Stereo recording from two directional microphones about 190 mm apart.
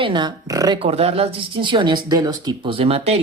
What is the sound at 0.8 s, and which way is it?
A woman's voice, 30° right (ahead or behind).